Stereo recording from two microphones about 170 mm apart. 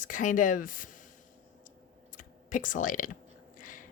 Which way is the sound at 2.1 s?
50° left (ahead or behind).